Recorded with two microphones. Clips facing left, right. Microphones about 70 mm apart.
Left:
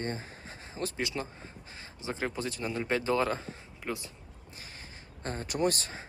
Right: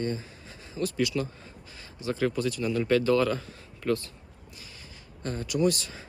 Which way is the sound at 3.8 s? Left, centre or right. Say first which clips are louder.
Right 9 dB; centre.